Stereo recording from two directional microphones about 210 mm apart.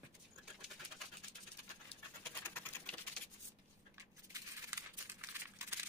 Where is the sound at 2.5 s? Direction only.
10° left (ahead or behind).